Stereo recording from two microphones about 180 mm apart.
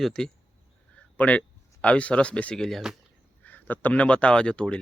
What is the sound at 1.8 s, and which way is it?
Speech, 5° left (ahead or behind).